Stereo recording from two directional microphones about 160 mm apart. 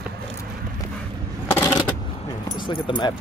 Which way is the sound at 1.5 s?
15° left (ahead or behind).